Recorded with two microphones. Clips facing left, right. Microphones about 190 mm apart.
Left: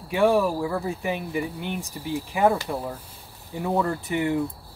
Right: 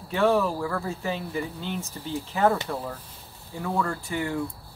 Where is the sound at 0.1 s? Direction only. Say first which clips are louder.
Left 2 dB; 15° left (ahead or behind).